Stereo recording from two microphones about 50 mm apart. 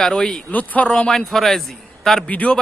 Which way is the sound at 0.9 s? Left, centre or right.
Centre.